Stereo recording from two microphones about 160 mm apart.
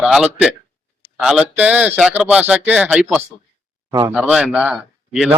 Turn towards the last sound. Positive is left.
turn(degrees=-5)  # may be behind; listen again after turning